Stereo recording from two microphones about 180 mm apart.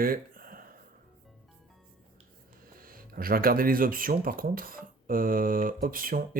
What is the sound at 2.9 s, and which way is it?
Speech, 55° right (ahead or behind).